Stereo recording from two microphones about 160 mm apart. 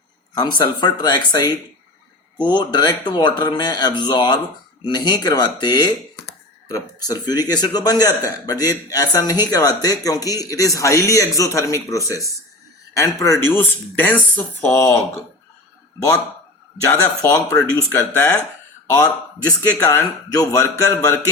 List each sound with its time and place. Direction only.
0.3 s speech: 30° left (ahead or behind)
17.2 s speech: 20° left (ahead or behind)
19.5 s speech: 15° left (ahead or behind)